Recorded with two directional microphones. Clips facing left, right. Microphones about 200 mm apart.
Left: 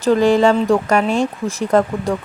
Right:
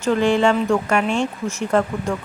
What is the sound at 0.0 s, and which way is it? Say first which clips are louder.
Speech: left 4 dB; 40° left (ahead or behind).